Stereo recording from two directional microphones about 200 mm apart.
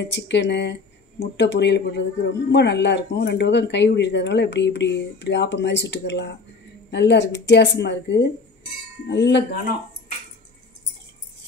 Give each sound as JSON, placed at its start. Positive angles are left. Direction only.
{"t": 0.0, "sound": "speech", "side_deg": 60}